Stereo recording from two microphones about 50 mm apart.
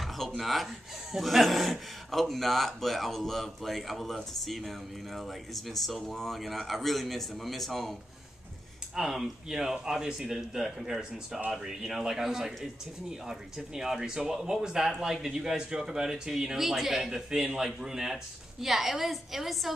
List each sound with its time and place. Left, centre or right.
0.4 s a man's voice: centre
8.9 s a man's voice: centre